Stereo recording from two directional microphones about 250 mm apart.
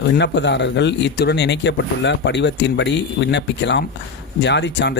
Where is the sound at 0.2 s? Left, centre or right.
Left.